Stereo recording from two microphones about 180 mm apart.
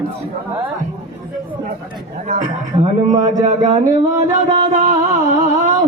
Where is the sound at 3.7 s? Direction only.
45° right (ahead or behind).